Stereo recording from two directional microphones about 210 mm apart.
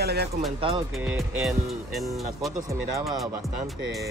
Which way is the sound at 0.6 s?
25° right (ahead or behind).